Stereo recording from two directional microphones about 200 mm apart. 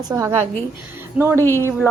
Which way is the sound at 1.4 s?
10° left (ahead or behind).